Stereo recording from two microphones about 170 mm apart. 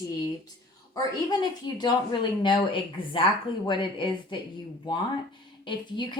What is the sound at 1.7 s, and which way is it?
A woman's voice, 25° left (ahead or behind).